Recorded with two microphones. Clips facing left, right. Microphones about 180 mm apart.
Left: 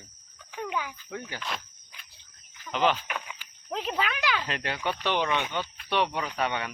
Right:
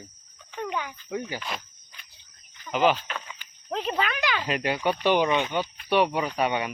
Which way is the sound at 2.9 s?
10° left (ahead or behind).